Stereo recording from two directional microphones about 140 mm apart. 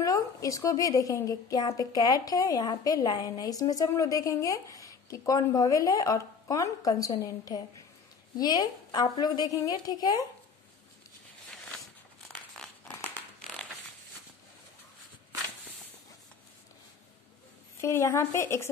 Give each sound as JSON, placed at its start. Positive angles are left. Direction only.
{"t": 0.0, "sound": "a woman's voice", "side_deg": 25}
{"t": 12.5, "sound": "crumpling", "side_deg": 5}
{"t": 17.7, "sound": "a woman's voice", "side_deg": 20}